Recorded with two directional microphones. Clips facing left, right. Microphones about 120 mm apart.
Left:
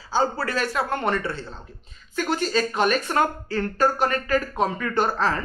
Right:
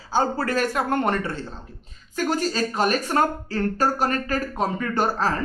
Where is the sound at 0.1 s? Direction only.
50° right (ahead or behind).